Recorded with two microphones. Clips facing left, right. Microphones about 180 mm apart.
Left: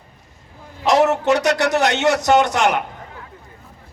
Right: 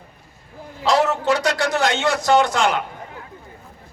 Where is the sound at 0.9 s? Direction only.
20° left (ahead or behind).